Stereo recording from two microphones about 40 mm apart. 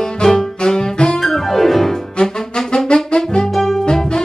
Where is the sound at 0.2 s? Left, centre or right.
Centre.